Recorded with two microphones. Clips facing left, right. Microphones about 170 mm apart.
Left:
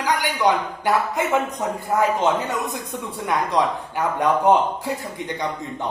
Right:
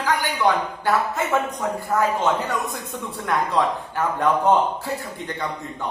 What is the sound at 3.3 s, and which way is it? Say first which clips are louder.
A man's voice: even; 15° left (ahead or behind).